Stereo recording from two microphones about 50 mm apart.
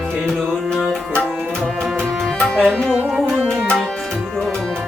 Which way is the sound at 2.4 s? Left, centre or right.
Centre.